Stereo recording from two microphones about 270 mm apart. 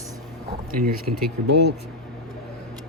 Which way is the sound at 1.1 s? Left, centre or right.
Right.